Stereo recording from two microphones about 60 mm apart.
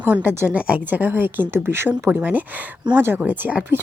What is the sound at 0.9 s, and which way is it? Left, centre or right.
A woman's voice, right.